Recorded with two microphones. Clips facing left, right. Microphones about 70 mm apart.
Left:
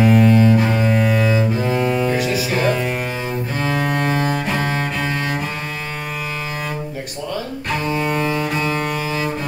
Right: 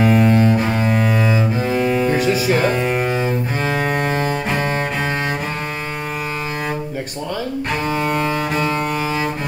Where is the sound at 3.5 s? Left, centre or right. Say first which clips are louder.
Right 1 dB; right.